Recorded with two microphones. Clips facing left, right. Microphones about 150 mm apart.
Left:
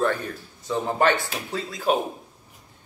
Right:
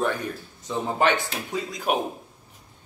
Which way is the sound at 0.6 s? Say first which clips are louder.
Left 1 dB; 20° right (ahead or behind).